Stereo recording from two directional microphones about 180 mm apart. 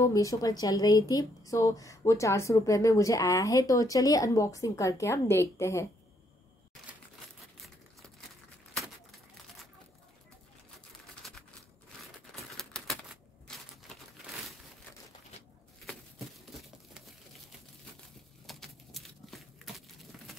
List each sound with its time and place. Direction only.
0.0 s a woman's voice: 20° left (ahead or behind)
11.2 s typewriter: centre (ahead or behind)
12.5 s crumpling: centre (ahead or behind)
18.5 s a sound: centre (ahead or behind)